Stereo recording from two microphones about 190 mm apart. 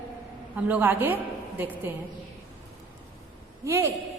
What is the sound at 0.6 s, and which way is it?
Speech, 10° right (ahead or behind).